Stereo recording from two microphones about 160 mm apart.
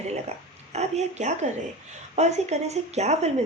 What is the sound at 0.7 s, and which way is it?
A woman's voice, 45° right (ahead or behind).